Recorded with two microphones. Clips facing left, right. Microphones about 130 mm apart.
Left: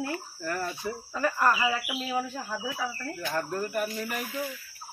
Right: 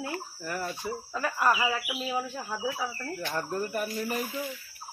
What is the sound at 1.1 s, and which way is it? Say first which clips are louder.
Speech: left 1 dB; centre (ahead or behind).